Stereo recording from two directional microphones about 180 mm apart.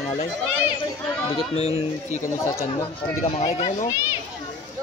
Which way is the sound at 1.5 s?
35° left (ahead or behind).